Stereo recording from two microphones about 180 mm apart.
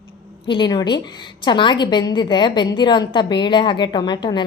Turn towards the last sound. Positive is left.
turn(degrees=25)  # may be behind; listen again after turning